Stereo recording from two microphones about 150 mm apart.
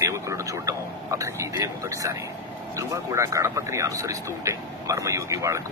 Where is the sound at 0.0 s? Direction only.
20° right (ahead or behind).